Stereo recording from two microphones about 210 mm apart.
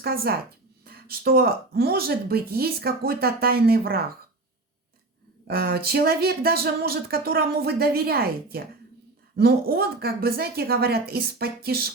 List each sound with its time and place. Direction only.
0.0 s speech: 45° right (ahead or behind)
5.5 s speech: 45° right (ahead or behind)